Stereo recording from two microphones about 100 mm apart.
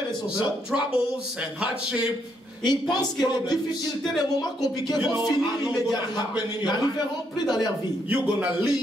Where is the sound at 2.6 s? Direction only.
45° left (ahead or behind).